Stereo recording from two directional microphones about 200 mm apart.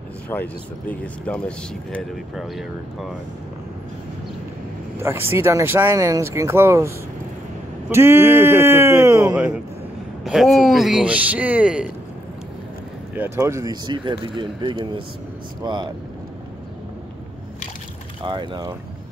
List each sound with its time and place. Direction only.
0.3 s a man's voice: 10° left (ahead or behind)
4.9 s speech: 10° right (ahead or behind)
7.9 s a man's voice: 10° right (ahead or behind)
13.1 s speech: 10° right (ahead or behind)
18.2 s speech: 25° right (ahead or behind)